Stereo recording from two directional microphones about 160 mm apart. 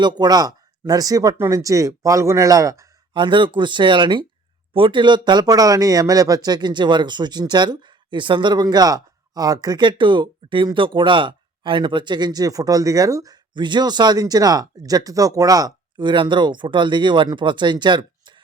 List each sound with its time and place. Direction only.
0.2 s speech: 25° right (ahead or behind)